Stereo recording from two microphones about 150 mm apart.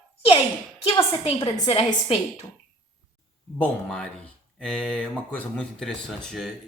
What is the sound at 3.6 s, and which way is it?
A man's voice, 10° left (ahead or behind).